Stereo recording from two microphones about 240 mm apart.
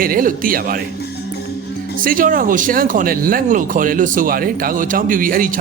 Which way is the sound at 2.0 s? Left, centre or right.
Right.